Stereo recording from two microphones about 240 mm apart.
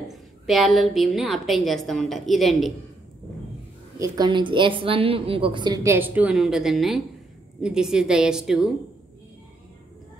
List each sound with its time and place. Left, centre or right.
0.1 s a woman's voice: centre
4.0 s a woman's voice: centre